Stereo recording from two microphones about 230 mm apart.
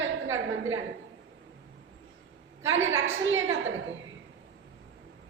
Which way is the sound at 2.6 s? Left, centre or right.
Right.